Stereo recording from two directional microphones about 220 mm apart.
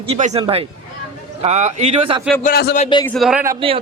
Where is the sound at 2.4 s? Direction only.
45° left (ahead or behind).